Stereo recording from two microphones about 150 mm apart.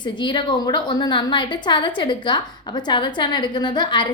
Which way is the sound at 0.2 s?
30° left (ahead or behind).